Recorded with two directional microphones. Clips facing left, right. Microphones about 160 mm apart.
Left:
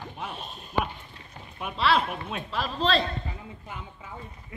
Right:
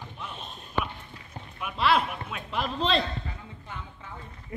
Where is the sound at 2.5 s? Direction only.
20° right (ahead or behind).